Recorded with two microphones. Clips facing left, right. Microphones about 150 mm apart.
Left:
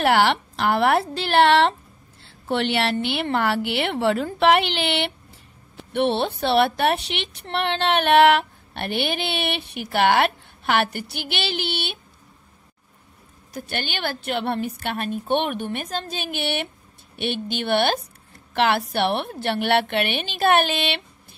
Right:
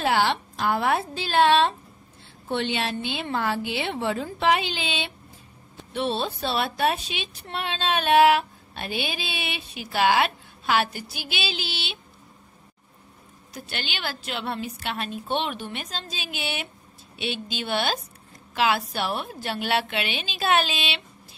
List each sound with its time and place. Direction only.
0.0 s a woman's voice: 75° left (ahead or behind); by 12.0 s 55° left (ahead or behind)
13.5 s speech: 50° left (ahead or behind)